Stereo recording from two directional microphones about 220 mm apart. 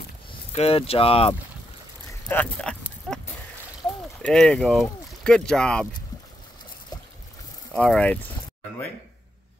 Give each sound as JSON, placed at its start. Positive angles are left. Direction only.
{"t": 0.5, "sound": "speech", "side_deg": 25}
{"t": 2.2, "sound": "a sound", "side_deg": 5}
{"t": 4.2, "sound": "speech", "side_deg": 5}
{"t": 7.7, "sound": "speech", "side_deg": 5}